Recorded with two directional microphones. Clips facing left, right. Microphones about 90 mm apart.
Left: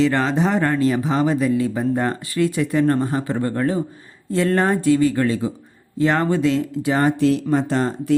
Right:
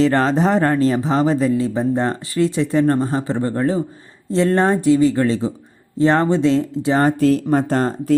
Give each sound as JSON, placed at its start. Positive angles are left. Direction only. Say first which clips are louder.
{"t": 0.0, "sound": "speech", "louder": "right 3 dB", "side_deg": -35}